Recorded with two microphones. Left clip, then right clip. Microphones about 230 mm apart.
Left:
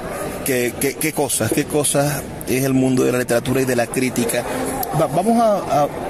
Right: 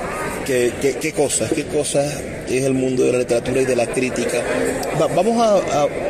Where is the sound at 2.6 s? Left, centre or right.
Left.